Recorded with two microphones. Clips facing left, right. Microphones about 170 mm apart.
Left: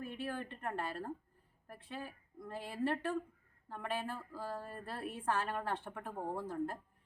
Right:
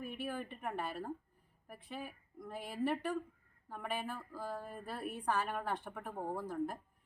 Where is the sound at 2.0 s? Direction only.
15° right (ahead or behind).